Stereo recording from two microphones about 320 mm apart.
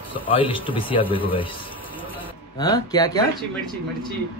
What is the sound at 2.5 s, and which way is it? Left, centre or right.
Speech, centre.